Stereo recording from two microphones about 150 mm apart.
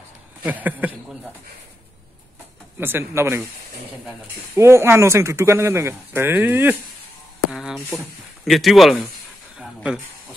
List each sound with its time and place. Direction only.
0.4 s speech: 10° right (ahead or behind)
2.8 s speech: 15° right (ahead or behind)
4.6 s speech: 15° right (ahead or behind)
7.5 s a sound: centre (ahead or behind)
8.5 s speech: centre (ahead or behind)